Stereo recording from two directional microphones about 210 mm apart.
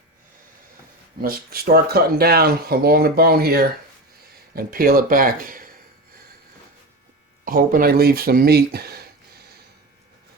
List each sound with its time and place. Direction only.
1.2 s speech: 45° right (ahead or behind)
7.4 s speech: 45° right (ahead or behind)